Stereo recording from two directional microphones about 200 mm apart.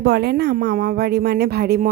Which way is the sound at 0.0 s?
55° right (ahead or behind).